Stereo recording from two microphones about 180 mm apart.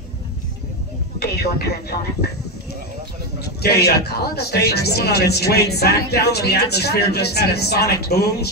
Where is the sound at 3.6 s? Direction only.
60° left (ahead or behind).